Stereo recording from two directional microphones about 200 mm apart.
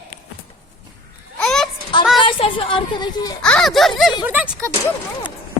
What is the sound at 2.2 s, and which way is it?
A woman's voice, 25° left (ahead or behind).